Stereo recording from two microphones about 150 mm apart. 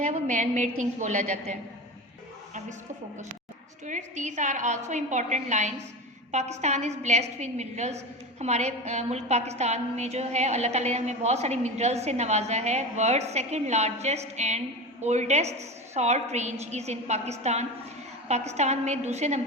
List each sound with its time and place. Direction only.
0.1 s a woman's voice: 55° right (ahead or behind)
3.8 s a woman's voice: 55° right (ahead or behind)